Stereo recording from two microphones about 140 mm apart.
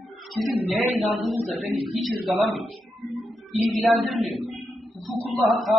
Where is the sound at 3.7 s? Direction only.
Centre (ahead or behind).